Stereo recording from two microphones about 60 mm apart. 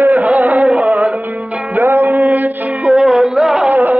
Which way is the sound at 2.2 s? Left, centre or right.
Right.